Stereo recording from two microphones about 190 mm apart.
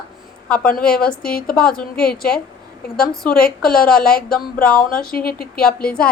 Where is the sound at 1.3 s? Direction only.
50° left (ahead or behind).